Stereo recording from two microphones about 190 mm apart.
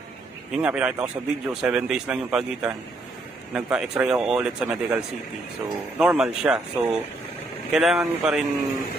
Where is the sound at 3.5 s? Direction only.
5° right (ahead or behind).